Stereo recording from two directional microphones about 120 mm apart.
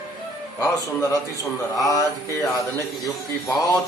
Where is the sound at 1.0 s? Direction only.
25° left (ahead or behind).